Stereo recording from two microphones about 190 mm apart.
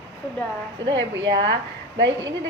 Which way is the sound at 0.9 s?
75° right (ahead or behind).